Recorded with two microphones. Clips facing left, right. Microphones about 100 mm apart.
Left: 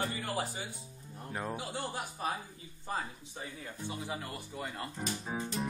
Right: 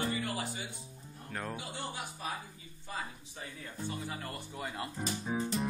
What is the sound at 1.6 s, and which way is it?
Music, 40° left (ahead or behind).